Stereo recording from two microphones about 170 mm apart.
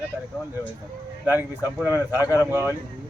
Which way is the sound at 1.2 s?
10° right (ahead or behind).